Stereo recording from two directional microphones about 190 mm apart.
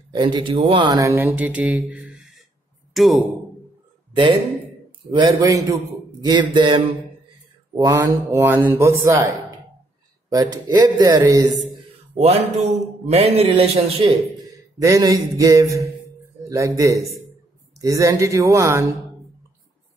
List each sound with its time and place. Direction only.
0.1 s speech: 25° right (ahead or behind); by 2.4 s 5° right (ahead or behind)
2.9 s a sound: centre (ahead or behind)
4.1 s speech: 25° right (ahead or behind)
11.6 s a sound: 35° right (ahead or behind)
13.0 s a man's voice: 30° right (ahead or behind)
14.8 s speech: 15° right (ahead or behind)